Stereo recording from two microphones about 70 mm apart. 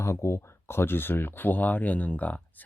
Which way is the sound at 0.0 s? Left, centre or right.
Left.